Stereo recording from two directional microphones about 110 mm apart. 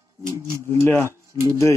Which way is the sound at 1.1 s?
25° right (ahead or behind).